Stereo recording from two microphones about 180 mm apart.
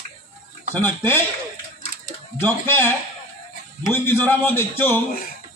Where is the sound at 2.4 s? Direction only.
10° left (ahead or behind).